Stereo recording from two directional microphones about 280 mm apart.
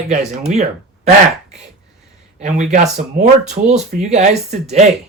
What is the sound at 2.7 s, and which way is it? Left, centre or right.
Speech, right.